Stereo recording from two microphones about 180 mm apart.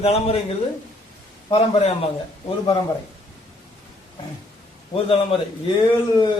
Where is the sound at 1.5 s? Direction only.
30° left (ahead or behind).